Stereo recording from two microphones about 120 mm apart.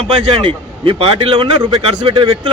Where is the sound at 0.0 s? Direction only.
50° right (ahead or behind).